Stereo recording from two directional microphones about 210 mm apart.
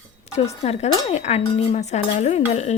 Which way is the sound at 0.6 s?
30° left (ahead or behind).